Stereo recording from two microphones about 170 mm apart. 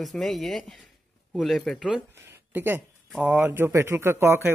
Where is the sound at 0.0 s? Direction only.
Centre (ahead or behind).